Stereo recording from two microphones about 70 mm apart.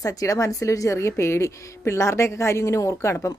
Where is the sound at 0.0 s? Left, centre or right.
Left.